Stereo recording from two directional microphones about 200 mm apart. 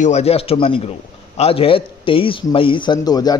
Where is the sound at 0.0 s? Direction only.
30° left (ahead or behind).